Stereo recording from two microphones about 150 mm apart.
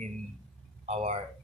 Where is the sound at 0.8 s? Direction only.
45° right (ahead or behind).